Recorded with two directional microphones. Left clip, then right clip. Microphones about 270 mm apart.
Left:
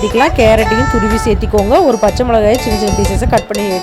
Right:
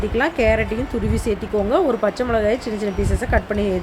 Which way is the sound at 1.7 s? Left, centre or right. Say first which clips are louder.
Left 9 dB; left.